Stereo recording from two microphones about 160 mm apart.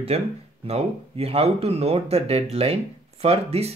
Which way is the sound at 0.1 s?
40° right (ahead or behind).